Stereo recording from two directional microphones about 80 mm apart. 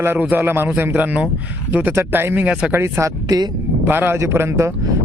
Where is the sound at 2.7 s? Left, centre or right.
Right.